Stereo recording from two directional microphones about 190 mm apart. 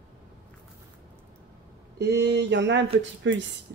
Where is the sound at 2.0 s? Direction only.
60° right (ahead or behind).